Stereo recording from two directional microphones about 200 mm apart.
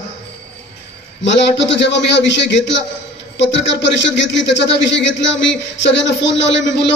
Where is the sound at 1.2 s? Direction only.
65° left (ahead or behind).